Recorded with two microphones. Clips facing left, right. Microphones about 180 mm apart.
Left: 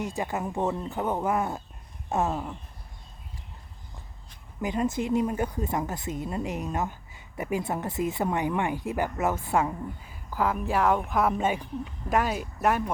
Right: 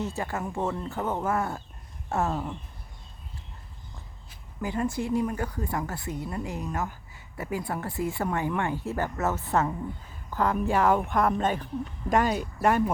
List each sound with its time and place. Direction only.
0.0 s speech: 15° left (ahead or behind)
2.3 s a woman's voice: 5° left (ahead or behind)
4.6 s a woman's voice: 20° left (ahead or behind); by 12.9 s centre (ahead or behind)